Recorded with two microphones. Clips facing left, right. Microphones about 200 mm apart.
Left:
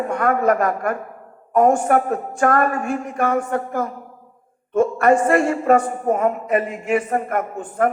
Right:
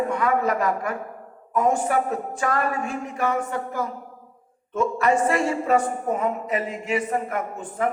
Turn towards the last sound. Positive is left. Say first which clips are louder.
# left 5 dB
turn(degrees=55)  # may be behind; listen again after turning